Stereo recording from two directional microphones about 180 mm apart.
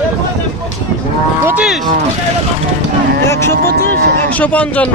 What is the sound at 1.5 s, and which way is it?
Speech, 5° right (ahead or behind).